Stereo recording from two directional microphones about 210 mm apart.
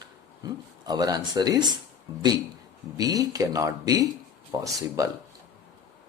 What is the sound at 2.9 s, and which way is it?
Speech, 15° right (ahead or behind).